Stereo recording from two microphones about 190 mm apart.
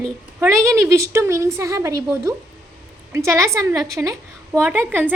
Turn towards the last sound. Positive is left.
turn(degrees=-10)  # may be behind; listen again after turning